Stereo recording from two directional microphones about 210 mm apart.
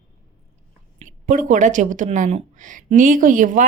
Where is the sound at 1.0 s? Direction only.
40° right (ahead or behind).